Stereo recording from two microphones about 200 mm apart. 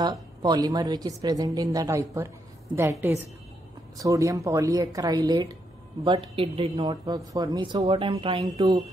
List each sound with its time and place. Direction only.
0.0 s speech: 20° right (ahead or behind)